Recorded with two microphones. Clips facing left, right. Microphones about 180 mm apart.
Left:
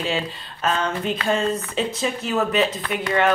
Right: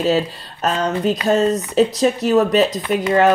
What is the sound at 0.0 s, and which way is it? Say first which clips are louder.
Speech: right 8 dB; 40° right (ahead or behind).